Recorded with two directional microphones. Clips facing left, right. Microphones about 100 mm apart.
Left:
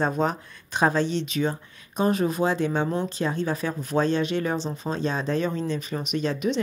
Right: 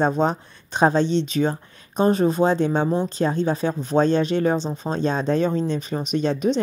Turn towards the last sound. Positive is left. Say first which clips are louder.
# right 4 dB
turn(degrees=-35)  # may be behind; listen again after turning